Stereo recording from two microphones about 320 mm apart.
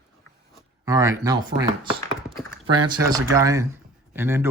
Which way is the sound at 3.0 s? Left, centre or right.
Centre.